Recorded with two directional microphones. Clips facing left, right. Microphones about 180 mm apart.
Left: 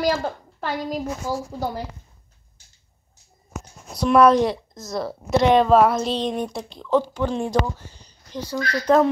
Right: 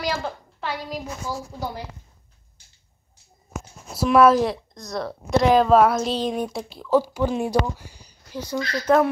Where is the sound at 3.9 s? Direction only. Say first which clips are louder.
Left 1 dB; 5° right (ahead or behind).